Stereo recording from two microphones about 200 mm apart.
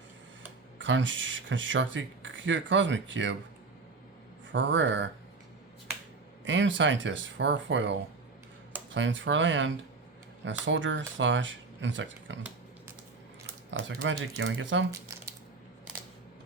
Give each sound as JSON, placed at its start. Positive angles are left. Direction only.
{"t": 0.8, "sound": "speech", "side_deg": -70}
{"t": 4.5, "sound": "speech", "side_deg": -65}
{"t": 6.4, "sound": "speech", "side_deg": -70}
{"t": 13.7, "sound": "speech", "side_deg": -65}